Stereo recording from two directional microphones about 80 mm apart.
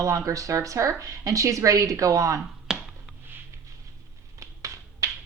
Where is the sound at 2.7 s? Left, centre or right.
Centre.